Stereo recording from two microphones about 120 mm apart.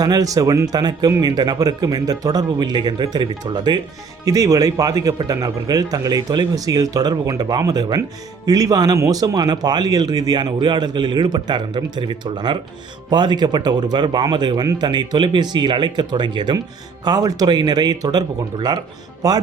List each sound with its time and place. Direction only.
0.0 s speech: 30° right (ahead or behind)